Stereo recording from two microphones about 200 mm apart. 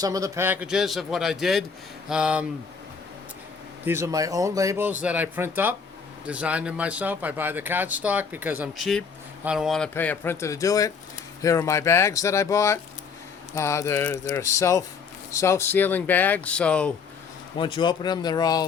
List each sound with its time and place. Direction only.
0.0 s a man's voice: 15° right (ahead or behind)
3.8 s speech: 15° right (ahead or behind); by 16.9 s 5° left (ahead or behind)
17.6 s speech: 25° left (ahead or behind)